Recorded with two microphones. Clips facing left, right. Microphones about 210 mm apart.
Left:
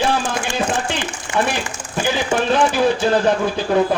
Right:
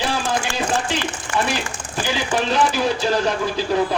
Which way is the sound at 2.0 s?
55° left (ahead or behind).